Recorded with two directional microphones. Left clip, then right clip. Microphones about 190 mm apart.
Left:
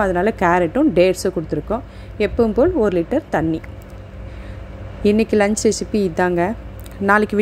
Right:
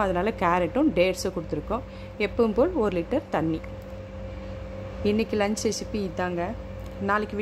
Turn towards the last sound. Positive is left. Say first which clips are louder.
# left 11 dB
turn(degrees=30)  # may be behind; listen again after turning